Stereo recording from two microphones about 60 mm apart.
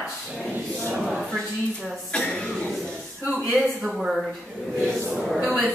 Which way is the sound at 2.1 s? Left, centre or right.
Centre.